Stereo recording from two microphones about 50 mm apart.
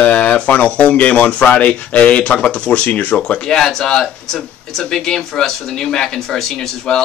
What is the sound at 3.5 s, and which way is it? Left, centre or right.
Speech, centre.